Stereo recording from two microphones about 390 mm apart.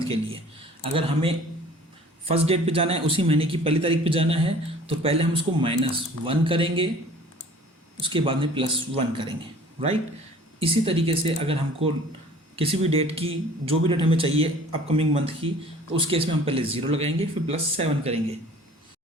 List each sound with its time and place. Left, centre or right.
0.8 s a man's voice: centre
8.0 s a man's voice: centre
10.6 s a man's voice: centre